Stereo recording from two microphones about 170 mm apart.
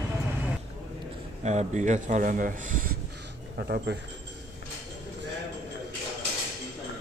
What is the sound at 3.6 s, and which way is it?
Speech, 65° right (ahead or behind).